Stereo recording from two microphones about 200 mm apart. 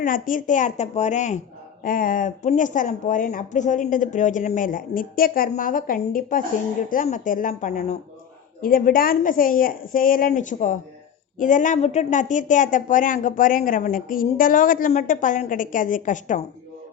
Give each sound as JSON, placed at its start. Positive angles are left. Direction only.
{"t": 0.0, "sound": "a woman's voice", "side_deg": 45}
{"t": 8.6, "sound": "a woman's voice", "side_deg": 45}